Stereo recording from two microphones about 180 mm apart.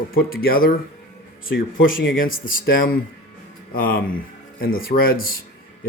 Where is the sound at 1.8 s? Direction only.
50° left (ahead or behind).